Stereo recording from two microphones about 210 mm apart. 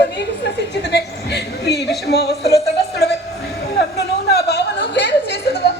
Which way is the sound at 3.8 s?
50° left (ahead or behind).